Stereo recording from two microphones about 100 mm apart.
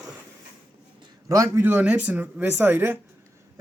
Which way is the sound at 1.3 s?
35° right (ahead or behind).